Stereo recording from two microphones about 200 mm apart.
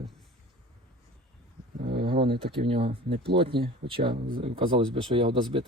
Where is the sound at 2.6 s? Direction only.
30° right (ahead or behind).